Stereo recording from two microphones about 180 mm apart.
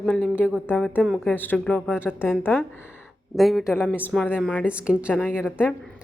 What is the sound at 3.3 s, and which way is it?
A woman's voice, centre (ahead or behind).